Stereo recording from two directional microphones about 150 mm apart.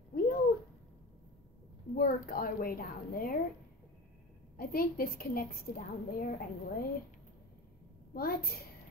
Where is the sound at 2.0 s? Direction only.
70° left (ahead or behind).